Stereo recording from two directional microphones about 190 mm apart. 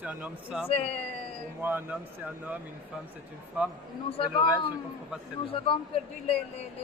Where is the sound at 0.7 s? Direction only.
30° left (ahead or behind).